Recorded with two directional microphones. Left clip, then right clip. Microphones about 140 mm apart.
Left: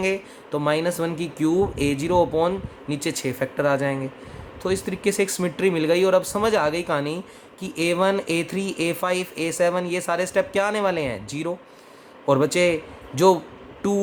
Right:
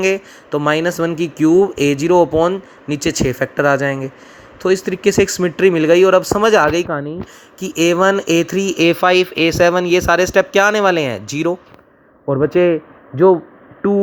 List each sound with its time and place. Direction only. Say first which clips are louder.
0.0 s speech: right 8 dB; 45° right (ahead or behind)
6.8 s speech: right 2 dB; 20° right (ahead or behind)
7.6 s speech: right 8 dB; 50° right (ahead or behind)
12.2 s speech: right 3 dB; 15° right (ahead or behind)
12.5 s a man's voice: right 7 dB; 40° right (ahead or behind)
13.1 s speech: right 6 dB; 10° right (ahead or behind)